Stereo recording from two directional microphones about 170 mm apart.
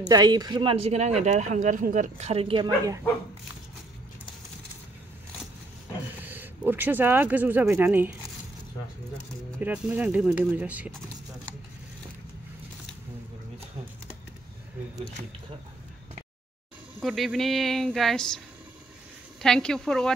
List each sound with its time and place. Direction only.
0.0 s speech: 25° right (ahead or behind)
6.1 s speech: 10° right (ahead or behind)
9.6 s speech: 10° right (ahead or behind)
17.0 s a woman's voice: centre (ahead or behind)
19.4 s a woman's voice: 5° left (ahead or behind)